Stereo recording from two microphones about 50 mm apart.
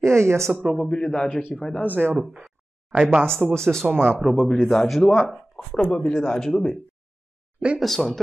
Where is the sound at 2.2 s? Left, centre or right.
Centre.